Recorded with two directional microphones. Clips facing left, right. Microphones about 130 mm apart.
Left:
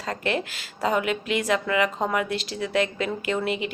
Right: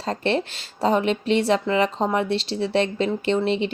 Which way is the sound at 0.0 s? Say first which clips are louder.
Right 4 dB; 30° right (ahead or behind).